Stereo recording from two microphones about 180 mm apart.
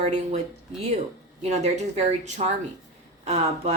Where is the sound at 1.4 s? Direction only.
40° right (ahead or behind).